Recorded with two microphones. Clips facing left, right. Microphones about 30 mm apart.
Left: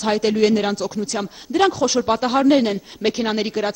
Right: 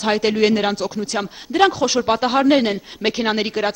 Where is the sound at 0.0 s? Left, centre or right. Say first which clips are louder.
Even; right.